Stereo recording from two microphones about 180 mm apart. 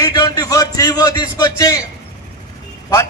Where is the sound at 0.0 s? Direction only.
20° left (ahead or behind).